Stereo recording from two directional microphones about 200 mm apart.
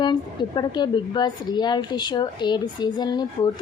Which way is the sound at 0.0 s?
20° left (ahead or behind).